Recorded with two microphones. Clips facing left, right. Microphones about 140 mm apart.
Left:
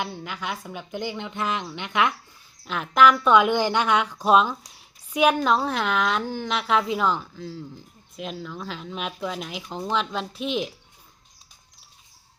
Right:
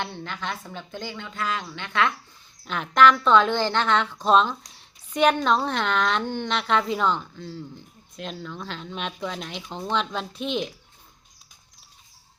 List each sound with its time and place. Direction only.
0.0 s a woman's voice: 10° left (ahead or behind)
2.6 s a woman's voice: centre (ahead or behind)